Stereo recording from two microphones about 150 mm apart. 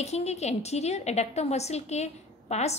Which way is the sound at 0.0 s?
45° left (ahead or behind).